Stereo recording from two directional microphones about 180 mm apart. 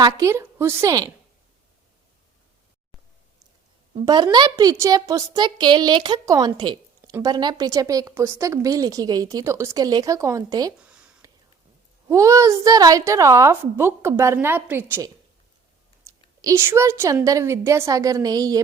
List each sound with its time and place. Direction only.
0.0 s a woman's voice: 15° right (ahead or behind)
4.0 s a woman's voice: 25° right (ahead or behind)
10.8 s a sound: 5° right (ahead or behind)
12.0 s a woman's voice: 15° right (ahead or behind)
16.4 s a woman's voice: 15° right (ahead or behind)